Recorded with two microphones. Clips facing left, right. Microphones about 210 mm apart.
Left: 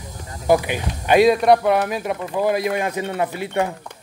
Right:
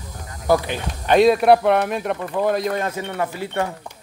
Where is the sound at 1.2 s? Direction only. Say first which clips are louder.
Right 1 dB; 5° right (ahead or behind); by 3.7 s 15° left (ahead or behind).